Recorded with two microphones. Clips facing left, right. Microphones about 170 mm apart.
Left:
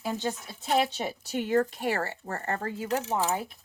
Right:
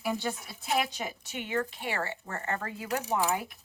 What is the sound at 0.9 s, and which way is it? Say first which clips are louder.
Speech: left 6 dB; 35° left (ahead or behind).